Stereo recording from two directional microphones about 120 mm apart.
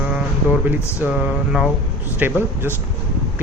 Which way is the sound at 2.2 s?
15° right (ahead or behind).